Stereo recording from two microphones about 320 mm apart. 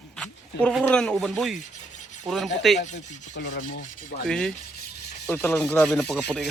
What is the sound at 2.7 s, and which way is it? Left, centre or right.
Rub, left.